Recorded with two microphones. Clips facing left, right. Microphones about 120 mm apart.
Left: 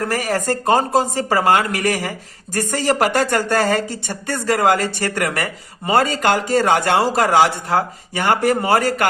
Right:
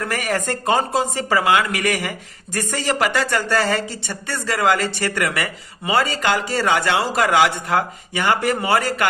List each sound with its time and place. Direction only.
0.0 s speech: 35° left (ahead or behind)